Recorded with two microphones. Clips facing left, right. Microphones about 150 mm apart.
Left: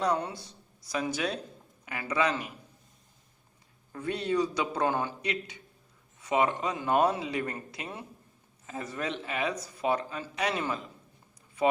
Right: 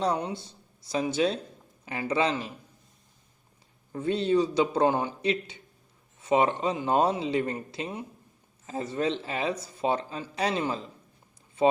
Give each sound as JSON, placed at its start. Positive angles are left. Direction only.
{"t": 0.2, "sound": "speech", "side_deg": -15}
{"t": 0.4, "sound": "speech", "side_deg": -30}
{"t": 3.9, "sound": "speech", "side_deg": -25}